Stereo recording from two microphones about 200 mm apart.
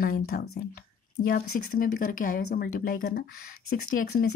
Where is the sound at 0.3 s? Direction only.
45° left (ahead or behind).